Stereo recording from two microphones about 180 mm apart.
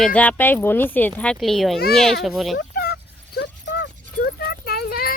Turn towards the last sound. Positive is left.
turn(degrees=55)  # may be behind; listen again after turning